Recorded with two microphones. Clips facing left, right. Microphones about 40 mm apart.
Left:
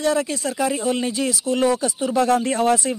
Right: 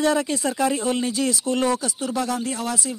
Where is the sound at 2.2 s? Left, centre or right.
Left.